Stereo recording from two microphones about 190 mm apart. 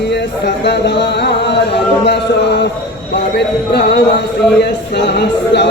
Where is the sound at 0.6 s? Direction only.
65° left (ahead or behind).